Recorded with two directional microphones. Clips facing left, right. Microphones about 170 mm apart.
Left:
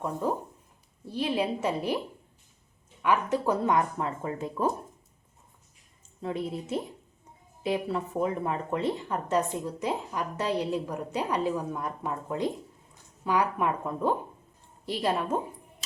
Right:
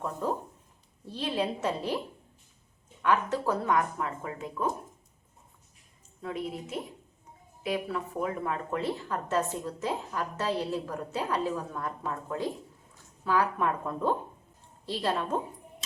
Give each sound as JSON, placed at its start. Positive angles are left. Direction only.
{"t": 0.0, "sound": "speech", "side_deg": 15}
{"t": 3.0, "sound": "speech", "side_deg": 10}
{"t": 6.2, "sound": "speech", "side_deg": 30}